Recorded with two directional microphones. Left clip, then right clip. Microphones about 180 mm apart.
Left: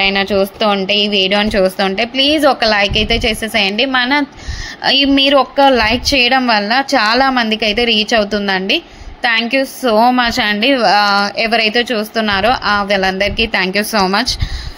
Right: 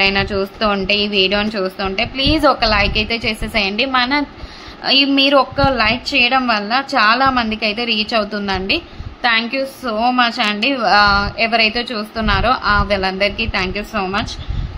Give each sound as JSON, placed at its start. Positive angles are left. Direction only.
{"t": 0.0, "sound": "a woman's voice", "side_deg": 15}
{"t": 2.1, "sound": "a woman's voice", "side_deg": 15}
{"t": 5.8, "sound": "a woman's voice", "side_deg": 30}